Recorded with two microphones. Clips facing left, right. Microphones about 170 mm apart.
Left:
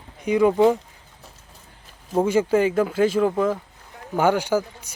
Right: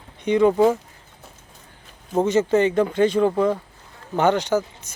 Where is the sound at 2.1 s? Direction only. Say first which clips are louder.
Right 1 dB; 5° left (ahead or behind).